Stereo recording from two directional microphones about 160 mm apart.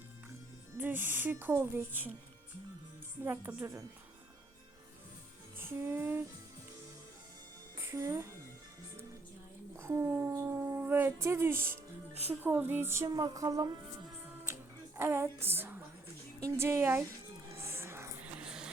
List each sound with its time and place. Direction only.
0.8 s a woman's voice: 10° right (ahead or behind)
3.2 s a woman's voice: 15° right (ahead or behind)
5.5 s music: 15° right (ahead or behind)
7.8 s speech: 20° right (ahead or behind)
9.7 s a woman's voice: 15° right (ahead or behind)
14.4 s music: 15° right (ahead or behind)
16.4 s a woman's voice: 15° right (ahead or behind)
17.5 s a sound: 15° right (ahead or behind)
18.3 s a sound: 5° right (ahead or behind)